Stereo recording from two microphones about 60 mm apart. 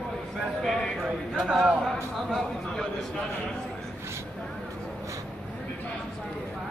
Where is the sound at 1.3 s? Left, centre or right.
Centre.